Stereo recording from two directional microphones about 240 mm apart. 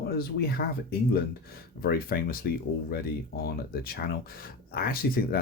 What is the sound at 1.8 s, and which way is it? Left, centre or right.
Speech, left.